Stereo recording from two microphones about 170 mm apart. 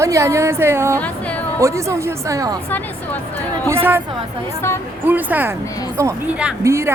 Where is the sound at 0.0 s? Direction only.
15° right (ahead or behind).